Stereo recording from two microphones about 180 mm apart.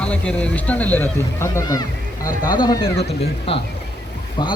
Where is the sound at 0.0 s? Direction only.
5° left (ahead or behind).